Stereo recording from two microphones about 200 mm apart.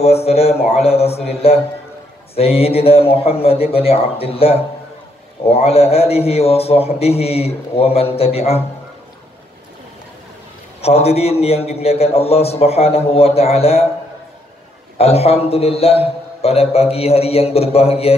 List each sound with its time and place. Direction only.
0.0 s a man's voice: 30° left (ahead or behind)
10.8 s a man's voice: 30° left (ahead or behind)
15.0 s a man's voice: 30° left (ahead or behind)